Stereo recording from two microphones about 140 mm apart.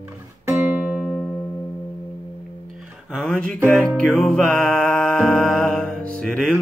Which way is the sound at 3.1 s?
5° left (ahead or behind).